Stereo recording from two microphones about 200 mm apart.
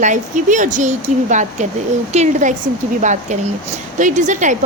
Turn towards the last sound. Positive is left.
turn(degrees=-40)  # may be behind; listen again after turning